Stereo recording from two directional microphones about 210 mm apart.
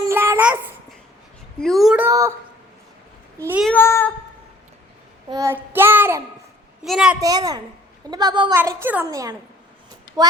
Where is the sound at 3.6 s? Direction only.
10° left (ahead or behind).